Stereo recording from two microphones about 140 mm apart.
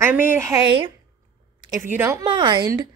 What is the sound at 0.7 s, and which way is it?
Speech, 35° right (ahead or behind).